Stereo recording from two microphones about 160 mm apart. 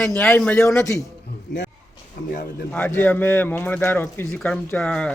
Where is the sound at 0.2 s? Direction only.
10° left (ahead or behind).